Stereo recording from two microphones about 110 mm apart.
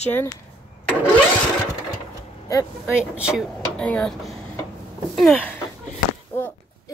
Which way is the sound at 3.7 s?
10° left (ahead or behind).